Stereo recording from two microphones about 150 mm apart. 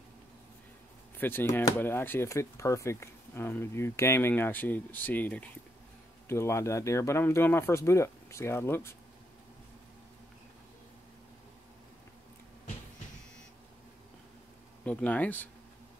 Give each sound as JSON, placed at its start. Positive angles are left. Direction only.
{"t": 1.1, "sound": "speech", "side_deg": 15}
{"t": 14.9, "sound": "speech", "side_deg": 10}